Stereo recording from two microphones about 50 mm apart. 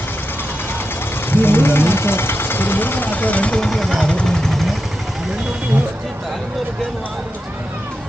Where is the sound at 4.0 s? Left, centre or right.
Left.